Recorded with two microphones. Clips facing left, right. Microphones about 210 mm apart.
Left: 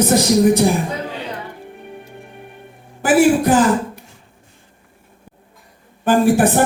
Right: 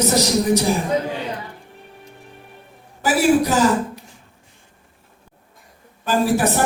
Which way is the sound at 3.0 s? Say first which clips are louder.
Left 3 dB; 55° left (ahead or behind).